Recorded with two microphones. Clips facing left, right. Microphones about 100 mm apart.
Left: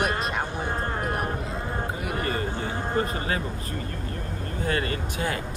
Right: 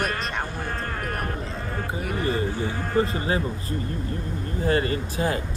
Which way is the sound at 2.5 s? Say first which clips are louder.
Right 1 dB; 25° left (ahead or behind).